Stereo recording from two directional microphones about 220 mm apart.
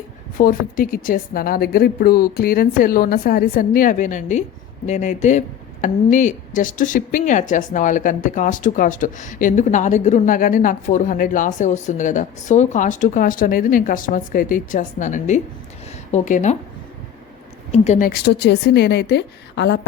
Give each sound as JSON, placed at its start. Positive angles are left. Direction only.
{"t": 0.3, "sound": "a woman's voice", "side_deg": 40}
{"t": 17.7, "sound": "speech", "side_deg": 30}
{"t": 18.1, "sound": "a woman's voice", "side_deg": 50}